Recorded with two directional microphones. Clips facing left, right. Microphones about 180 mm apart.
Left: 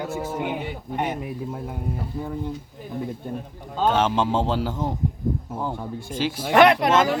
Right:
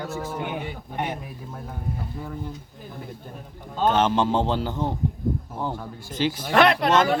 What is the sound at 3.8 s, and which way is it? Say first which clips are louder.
A man's voice: even; 5° left (ahead or behind).